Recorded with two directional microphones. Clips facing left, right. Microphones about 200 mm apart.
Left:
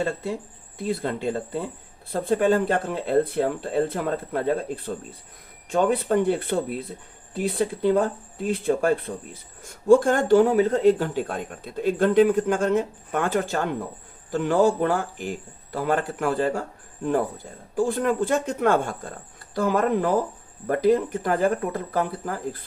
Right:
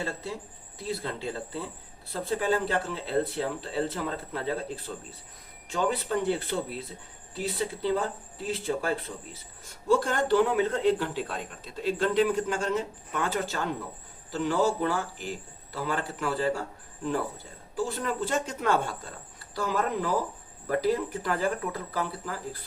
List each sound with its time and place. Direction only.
0.0 s speech: 50° left (ahead or behind)